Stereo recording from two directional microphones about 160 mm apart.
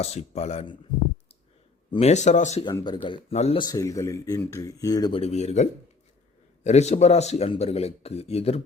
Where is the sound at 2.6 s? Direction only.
30° left (ahead or behind).